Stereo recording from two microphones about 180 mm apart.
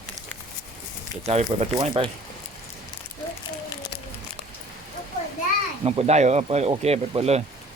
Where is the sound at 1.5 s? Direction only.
30° right (ahead or behind).